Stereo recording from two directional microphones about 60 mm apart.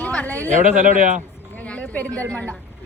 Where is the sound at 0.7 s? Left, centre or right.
Centre.